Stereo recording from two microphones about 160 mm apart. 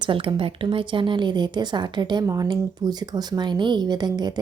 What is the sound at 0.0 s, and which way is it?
A woman's voice, 35° right (ahead or behind).